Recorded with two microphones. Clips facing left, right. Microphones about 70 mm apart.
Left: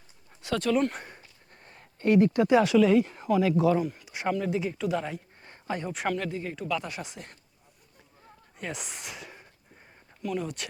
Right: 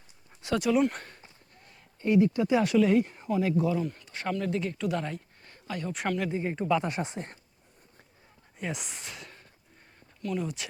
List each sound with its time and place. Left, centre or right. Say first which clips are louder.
0.5 s speech: right 1 dB; centre
0.9 s speech: left 1 dB; centre
1.5 s a sound: left 3 dB; left
2.0 s speech: left 2 dB; left
3.2 s speech: left 3 dB; left
3.8 s speech: left 3 dB; centre
5.4 s a sound: left 5 dB; left
5.9 s speech: right 1 dB; centre
6.3 s speech: right 4 dB; right
8.5 s speech: right 1 dB; centre